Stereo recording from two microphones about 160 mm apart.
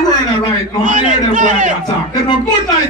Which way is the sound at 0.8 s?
55° right (ahead or behind).